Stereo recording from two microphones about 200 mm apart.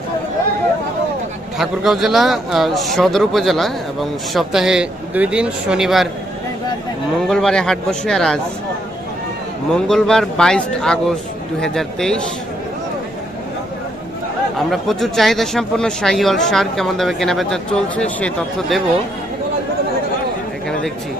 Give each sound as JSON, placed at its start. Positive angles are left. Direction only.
{"t": 1.6, "sound": "speech", "side_deg": 0}
{"t": 7.2, "sound": "speech", "side_deg": 0}
{"t": 9.8, "sound": "speech", "side_deg": 5}
{"t": 14.7, "sound": "speech", "side_deg": 0}